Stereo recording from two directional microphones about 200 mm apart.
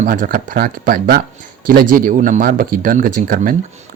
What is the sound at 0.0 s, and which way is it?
Speech, 40° right (ahead or behind).